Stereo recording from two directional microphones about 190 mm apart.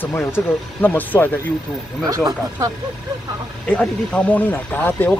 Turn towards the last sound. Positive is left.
turn(degrees=10)  # may be behind; listen again after turning